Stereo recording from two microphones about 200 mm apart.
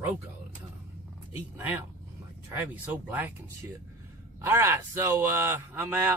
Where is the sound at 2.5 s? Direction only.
10° right (ahead or behind).